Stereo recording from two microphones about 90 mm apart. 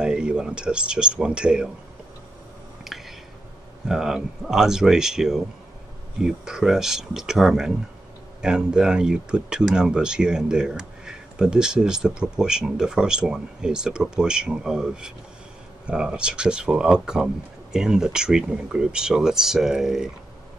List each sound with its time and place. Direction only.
0.0 s speech: 10° right (ahead or behind)
2.8 s a sound: centre (ahead or behind)
3.8 s speech: 5° right (ahead or behind)